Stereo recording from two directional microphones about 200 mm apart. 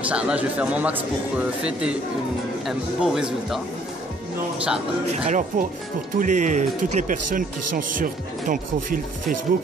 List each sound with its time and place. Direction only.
0.1 s speech: 5° right (ahead or behind)
5.2 s speech: 35° right (ahead or behind)